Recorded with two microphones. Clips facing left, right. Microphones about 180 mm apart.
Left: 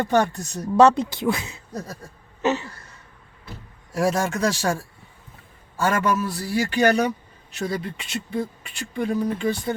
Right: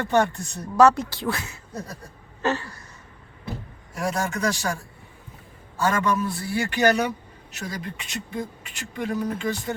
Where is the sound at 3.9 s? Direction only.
90° left.